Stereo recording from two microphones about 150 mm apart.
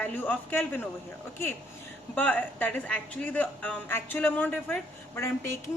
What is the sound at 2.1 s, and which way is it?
A woman's voice, 10° left (ahead or behind).